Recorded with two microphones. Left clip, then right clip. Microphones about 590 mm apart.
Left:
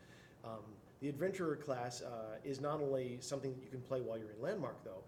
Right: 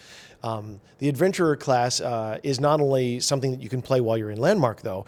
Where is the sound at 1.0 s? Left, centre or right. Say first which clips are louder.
Right 18 dB; right.